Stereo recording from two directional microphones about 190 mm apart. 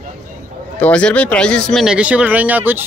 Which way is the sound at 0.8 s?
5° left (ahead or behind).